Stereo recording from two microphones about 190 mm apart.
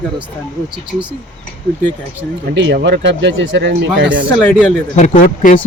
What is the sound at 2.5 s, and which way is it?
Speech, 70° right (ahead or behind).